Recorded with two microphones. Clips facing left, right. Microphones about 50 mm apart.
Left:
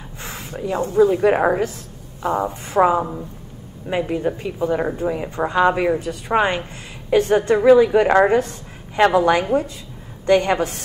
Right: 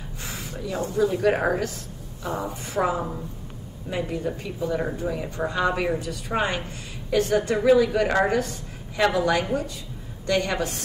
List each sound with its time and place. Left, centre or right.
0.2 s speech: left
2.2 s a woman's voice: left
4.4 s a woman's voice: left